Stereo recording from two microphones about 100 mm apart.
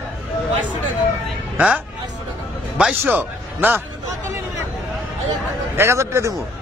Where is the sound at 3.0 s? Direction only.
20° right (ahead or behind).